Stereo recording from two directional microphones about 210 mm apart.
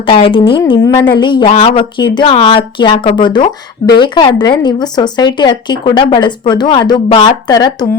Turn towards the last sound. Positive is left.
turn(degrees=20)  # may be behind; listen again after turning